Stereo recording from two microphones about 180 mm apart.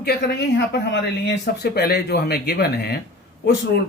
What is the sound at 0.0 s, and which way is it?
Speech, 60° left (ahead or behind).